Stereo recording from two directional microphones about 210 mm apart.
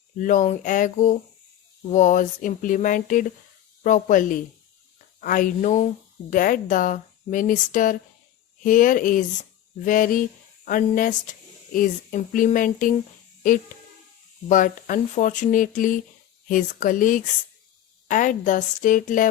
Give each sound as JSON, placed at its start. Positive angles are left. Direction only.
{"t": 0.2, "sound": "speech", "side_deg": 40}
{"t": 14.5, "sound": "speech", "side_deg": 40}